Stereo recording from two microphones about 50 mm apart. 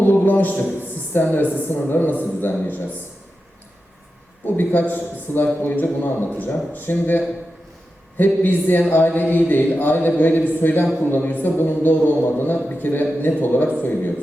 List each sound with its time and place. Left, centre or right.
0.0 s a sound: left
1.5 s a man's voice: left
4.4 s a man's voice: left